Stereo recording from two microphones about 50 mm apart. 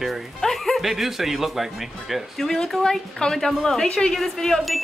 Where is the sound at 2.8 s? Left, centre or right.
Centre.